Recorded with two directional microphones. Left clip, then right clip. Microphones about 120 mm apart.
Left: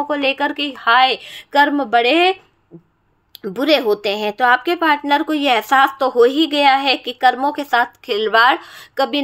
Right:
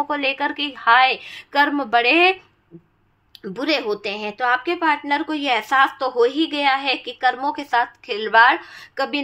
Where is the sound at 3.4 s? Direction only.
50° left (ahead or behind).